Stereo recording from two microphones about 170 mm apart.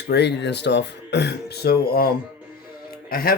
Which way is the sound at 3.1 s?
60° left (ahead or behind).